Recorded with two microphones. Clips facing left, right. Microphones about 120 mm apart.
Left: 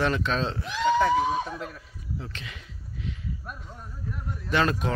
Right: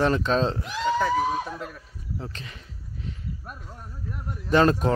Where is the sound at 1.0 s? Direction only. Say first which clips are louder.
Left 1 dB; centre (ahead or behind).